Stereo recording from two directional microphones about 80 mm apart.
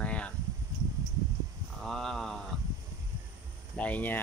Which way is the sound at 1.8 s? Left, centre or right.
Centre.